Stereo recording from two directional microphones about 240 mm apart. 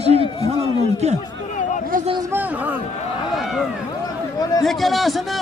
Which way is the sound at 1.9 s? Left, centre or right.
Right.